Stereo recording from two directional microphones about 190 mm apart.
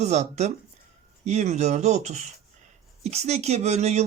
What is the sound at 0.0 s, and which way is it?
Speech, 35° right (ahead or behind).